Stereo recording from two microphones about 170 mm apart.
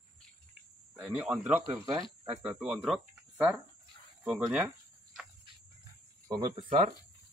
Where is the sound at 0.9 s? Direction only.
5° right (ahead or behind).